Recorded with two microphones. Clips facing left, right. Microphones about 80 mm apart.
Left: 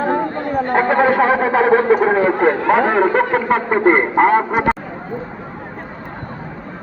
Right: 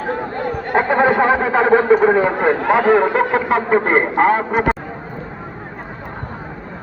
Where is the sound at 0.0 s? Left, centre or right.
Left.